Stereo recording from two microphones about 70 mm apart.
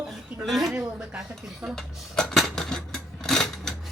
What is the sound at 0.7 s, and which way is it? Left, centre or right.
Speech, centre.